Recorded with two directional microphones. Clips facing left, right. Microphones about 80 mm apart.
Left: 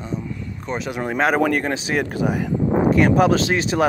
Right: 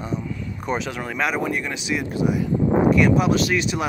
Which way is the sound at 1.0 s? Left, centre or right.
Left.